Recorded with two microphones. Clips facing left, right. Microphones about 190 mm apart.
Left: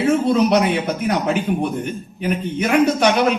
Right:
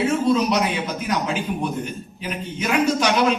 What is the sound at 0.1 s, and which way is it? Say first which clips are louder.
A man's voice: left 4 dB; 60° left (ahead or behind).